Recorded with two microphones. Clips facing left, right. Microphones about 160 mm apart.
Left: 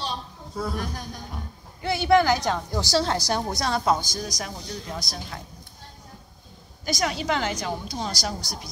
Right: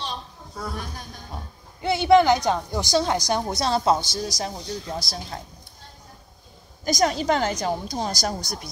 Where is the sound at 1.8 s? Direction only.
20° right (ahead or behind).